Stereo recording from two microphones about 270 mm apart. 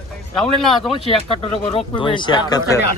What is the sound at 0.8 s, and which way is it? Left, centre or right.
Speech, centre.